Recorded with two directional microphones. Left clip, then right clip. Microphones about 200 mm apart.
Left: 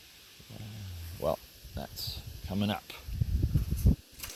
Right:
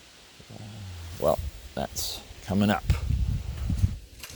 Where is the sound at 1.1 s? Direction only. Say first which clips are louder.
Right 7 dB; 30° right (ahead or behind).